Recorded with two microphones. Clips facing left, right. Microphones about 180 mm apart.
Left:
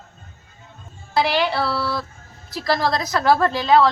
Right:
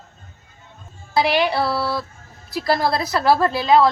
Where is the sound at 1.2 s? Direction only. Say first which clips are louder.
Right 2 dB; 15° right (ahead or behind).